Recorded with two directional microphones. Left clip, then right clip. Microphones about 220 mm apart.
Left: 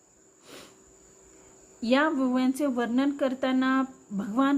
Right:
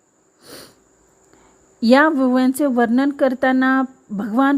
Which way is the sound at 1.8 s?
45° right (ahead or behind).